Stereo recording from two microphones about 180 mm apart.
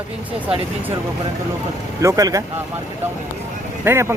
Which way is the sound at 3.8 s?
15° right (ahead or behind).